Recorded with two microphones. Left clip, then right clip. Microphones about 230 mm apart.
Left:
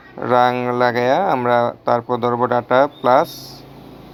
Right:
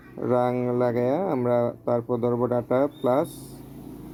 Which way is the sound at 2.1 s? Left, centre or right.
Left.